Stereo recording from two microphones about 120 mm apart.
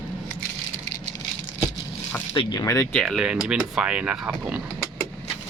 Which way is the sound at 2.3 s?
35° left (ahead or behind).